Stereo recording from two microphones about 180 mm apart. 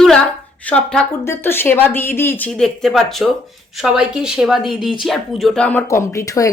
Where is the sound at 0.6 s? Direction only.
5° left (ahead or behind).